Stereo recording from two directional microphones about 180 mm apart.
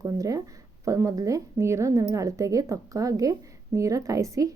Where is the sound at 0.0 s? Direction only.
20° right (ahead or behind).